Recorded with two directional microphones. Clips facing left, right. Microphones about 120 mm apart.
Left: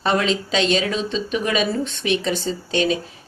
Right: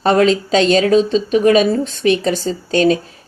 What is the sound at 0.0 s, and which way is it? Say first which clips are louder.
Speech: right 8 dB; 40° right (ahead or behind).